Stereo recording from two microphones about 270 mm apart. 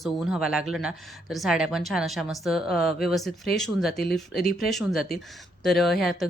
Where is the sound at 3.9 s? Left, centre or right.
Left.